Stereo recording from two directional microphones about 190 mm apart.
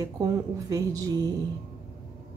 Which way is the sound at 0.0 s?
20° right (ahead or behind).